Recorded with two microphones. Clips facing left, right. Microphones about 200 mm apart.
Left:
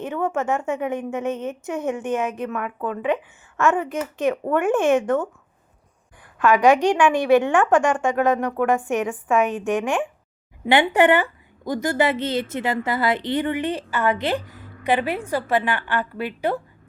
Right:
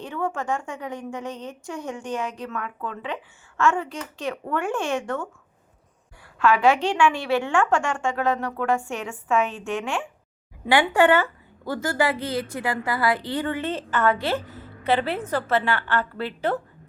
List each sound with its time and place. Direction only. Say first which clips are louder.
0.0 s a woman's voice: left 4 dB; 20° left (ahead or behind)
6.4 s a woman's voice: left 3 dB; 15° left (ahead or behind)